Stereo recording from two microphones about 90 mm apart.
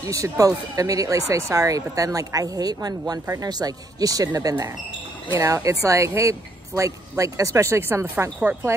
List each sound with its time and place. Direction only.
0.0 s speech: 40° right (ahead or behind)